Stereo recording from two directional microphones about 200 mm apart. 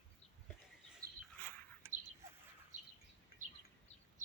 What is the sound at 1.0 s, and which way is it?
Dog, 15° right (ahead or behind).